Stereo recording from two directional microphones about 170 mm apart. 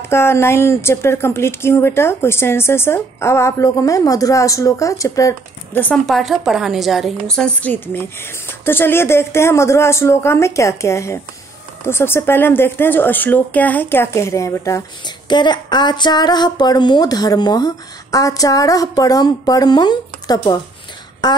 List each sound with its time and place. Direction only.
0.0 s a woman's voice: 15° left (ahead or behind)
5.8 s a woman's voice: 5° left (ahead or behind); by 20.6 s 25° left (ahead or behind)
21.2 s a sound: 25° left (ahead or behind)